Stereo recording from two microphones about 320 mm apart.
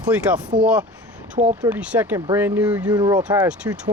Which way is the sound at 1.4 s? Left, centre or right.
Right.